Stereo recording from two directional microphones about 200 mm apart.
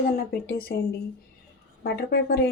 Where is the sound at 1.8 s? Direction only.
50° left (ahead or behind).